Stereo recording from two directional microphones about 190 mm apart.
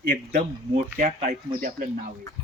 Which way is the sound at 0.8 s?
40° right (ahead or behind).